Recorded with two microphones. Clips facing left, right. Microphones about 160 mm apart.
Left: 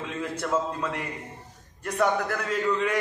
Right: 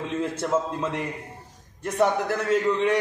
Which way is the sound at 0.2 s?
25° right (ahead or behind).